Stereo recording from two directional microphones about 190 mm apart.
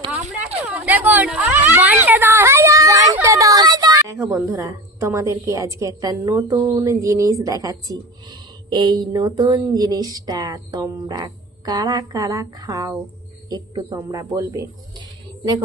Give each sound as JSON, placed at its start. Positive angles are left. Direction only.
{"t": 0.6, "sound": "speech", "side_deg": -10}